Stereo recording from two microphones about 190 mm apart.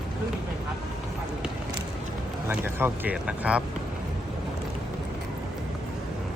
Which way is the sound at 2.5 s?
10° right (ahead or behind).